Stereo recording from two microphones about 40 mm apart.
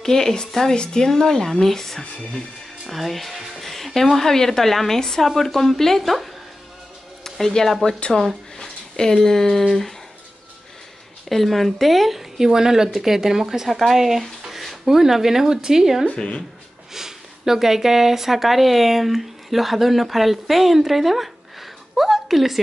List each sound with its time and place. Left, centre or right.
0.0 s speech: centre
11.2 s speech: centre
16.2 s speech: left
16.9 s speech: centre